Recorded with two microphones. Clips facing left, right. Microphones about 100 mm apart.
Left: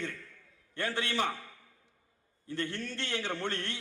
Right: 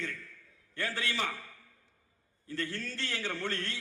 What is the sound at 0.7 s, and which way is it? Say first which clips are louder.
Speech: left 2 dB; 20° left (ahead or behind).